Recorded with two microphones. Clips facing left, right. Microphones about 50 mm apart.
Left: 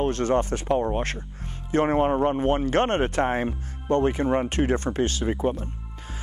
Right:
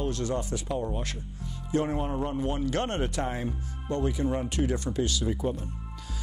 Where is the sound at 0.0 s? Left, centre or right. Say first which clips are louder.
Left 7 dB; left.